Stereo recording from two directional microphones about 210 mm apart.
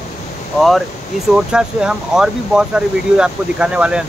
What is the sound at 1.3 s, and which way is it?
Speech, 5° right (ahead or behind).